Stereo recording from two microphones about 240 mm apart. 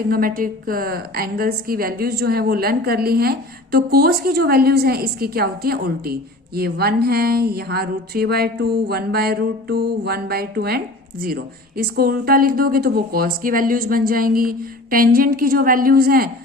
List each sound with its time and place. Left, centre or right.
0.1 s a woman's voice: right
11.8 s a woman's voice: right